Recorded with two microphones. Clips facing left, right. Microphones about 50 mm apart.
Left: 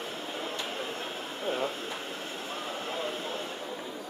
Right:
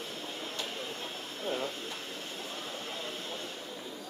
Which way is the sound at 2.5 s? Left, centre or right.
Left.